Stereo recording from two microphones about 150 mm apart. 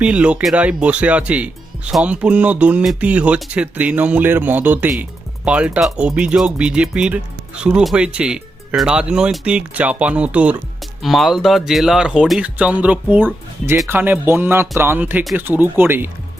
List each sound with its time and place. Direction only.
0.0 s speech: 5° right (ahead or behind)